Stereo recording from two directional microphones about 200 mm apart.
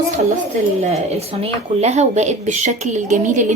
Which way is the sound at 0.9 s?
30° right (ahead or behind).